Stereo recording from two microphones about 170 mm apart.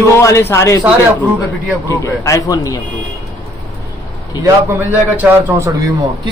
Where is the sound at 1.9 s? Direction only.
20° left (ahead or behind).